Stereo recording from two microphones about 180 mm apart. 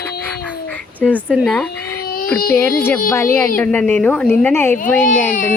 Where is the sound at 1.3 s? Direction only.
5° left (ahead or behind).